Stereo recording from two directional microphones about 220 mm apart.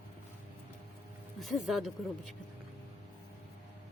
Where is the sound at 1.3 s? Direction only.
Centre (ahead or behind).